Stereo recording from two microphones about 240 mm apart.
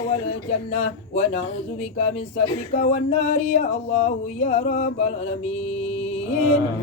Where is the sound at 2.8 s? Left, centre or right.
Left.